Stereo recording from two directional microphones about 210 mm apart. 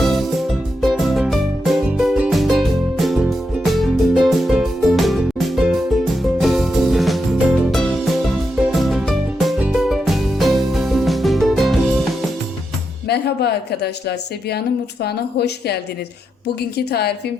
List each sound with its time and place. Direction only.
0.0 s music: centre (ahead or behind)
13.1 s a woman's voice: 50° left (ahead or behind)